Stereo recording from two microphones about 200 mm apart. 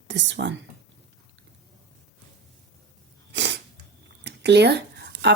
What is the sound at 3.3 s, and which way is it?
Sneeze, 60° right (ahead or behind).